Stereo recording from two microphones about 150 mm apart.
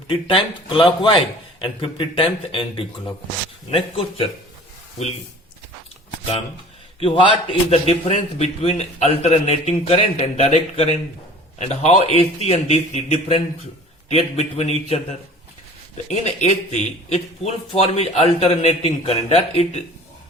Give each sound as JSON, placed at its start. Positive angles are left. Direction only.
{"t": 0.1, "sound": "speech", "side_deg": 35}
{"t": 7.0, "sound": "a man's voice", "side_deg": 35}
{"t": 16.0, "sound": "a man's voice", "side_deg": 45}